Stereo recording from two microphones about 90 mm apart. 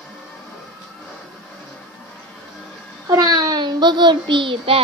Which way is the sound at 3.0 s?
45° right (ahead or behind).